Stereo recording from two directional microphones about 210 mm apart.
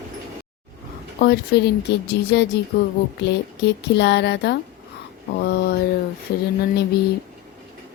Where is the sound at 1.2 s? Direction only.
50° left (ahead or behind).